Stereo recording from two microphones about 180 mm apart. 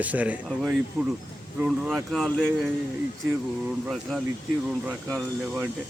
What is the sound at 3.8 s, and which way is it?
Speech, centre (ahead or behind).